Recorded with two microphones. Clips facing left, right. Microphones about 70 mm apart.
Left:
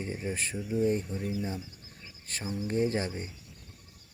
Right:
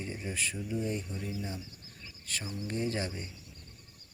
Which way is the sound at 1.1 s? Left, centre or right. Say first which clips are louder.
Left 5 dB; centre.